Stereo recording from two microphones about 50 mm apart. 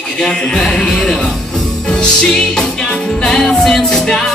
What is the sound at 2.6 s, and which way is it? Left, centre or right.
Music, centre.